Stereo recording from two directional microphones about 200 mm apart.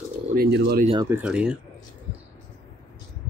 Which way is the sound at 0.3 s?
50° right (ahead or behind).